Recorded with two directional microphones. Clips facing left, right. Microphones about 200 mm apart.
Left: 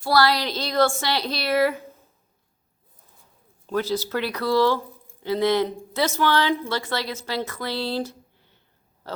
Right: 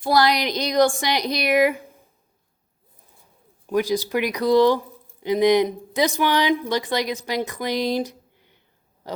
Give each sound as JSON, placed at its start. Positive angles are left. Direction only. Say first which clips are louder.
{"t": 0.0, "sound": "speech", "louder": "right 1 dB", "side_deg": -20}
{"t": 3.7, "sound": "speech", "louder": "right 3 dB", "side_deg": -15}
{"t": 9.0, "sound": "a sound", "louder": "right 2 dB", "side_deg": -15}